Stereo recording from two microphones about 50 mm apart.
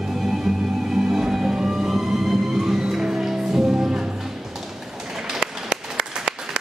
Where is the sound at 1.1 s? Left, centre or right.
Centre.